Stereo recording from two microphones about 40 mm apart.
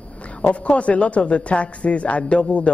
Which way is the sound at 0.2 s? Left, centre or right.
Left.